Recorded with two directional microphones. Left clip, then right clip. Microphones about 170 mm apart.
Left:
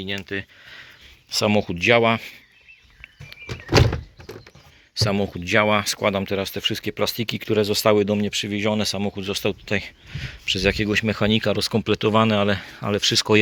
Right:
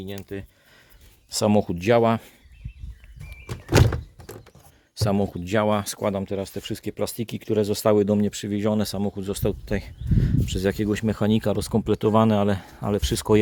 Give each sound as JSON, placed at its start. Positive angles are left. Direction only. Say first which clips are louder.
{"t": 0.0, "sound": "speech", "louder": "left 7 dB", "side_deg": -10}
{"t": 1.3, "sound": "speech", "louder": "left 1 dB", "side_deg": -35}
{"t": 3.0, "sound": "a sound", "louder": "left 7 dB", "side_deg": -15}
{"t": 4.9, "sound": "speech", "louder": "left 2 dB", "side_deg": -30}
{"t": 6.2, "sound": "speech", "louder": "left 6 dB", "side_deg": -10}
{"t": 7.6, "sound": "speech", "louder": "left 2 dB", "side_deg": -30}